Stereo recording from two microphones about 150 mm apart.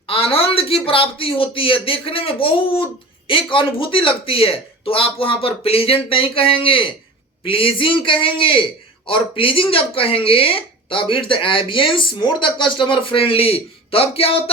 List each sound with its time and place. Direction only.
0.1 s a man's voice: 40° left (ahead or behind)